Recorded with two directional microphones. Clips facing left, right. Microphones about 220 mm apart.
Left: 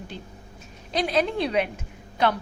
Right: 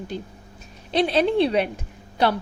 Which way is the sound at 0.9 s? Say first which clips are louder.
Right 4 dB; 30° right (ahead or behind).